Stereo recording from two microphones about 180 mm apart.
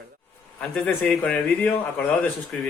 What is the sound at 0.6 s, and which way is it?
Speech, 5° left (ahead or behind).